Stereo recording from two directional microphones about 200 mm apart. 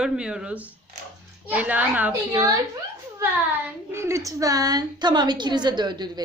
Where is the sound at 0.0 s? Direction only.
5° right (ahead or behind).